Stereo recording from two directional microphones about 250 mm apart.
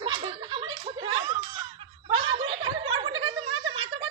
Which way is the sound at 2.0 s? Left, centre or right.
Right.